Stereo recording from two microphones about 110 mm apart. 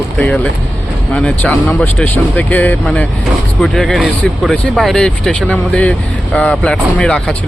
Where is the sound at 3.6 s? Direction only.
Centre (ahead or behind).